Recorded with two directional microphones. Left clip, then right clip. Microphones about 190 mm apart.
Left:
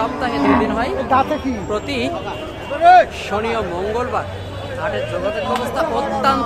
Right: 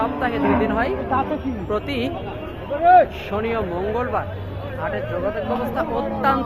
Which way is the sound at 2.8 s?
25° right (ahead or behind).